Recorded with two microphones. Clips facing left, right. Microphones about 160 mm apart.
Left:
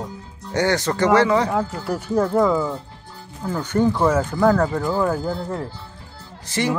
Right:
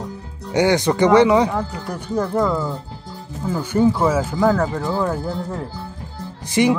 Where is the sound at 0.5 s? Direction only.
15° right (ahead or behind).